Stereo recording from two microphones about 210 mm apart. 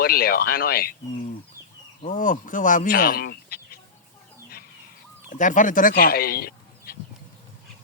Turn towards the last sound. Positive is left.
turn(degrees=45)  # may be behind; listen again after turning